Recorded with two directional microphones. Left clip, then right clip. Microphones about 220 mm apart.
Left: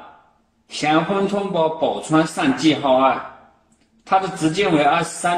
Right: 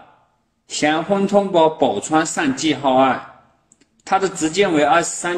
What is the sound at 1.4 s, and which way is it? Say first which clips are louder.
A woman's voice: right 4 dB; 30° right (ahead or behind).